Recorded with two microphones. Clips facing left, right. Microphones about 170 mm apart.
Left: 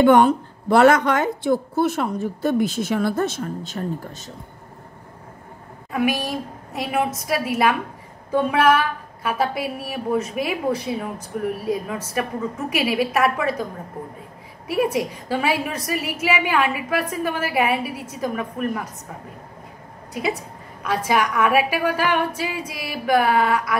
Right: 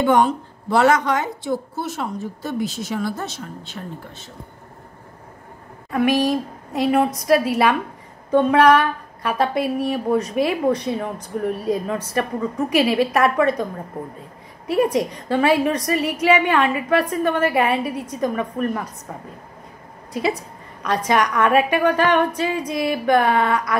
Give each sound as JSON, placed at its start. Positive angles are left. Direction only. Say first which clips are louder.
{"t": 0.0, "sound": "a woman's voice", "louder": "left 3 dB", "side_deg": 60}
{"t": 5.9, "sound": "a woman's voice", "louder": "right 4 dB", "side_deg": 5}
{"t": 14.7, "sound": "a woman's voice", "louder": "right 3 dB", "side_deg": 5}
{"t": 20.1, "sound": "a woman's voice", "louder": "right 3 dB", "side_deg": 0}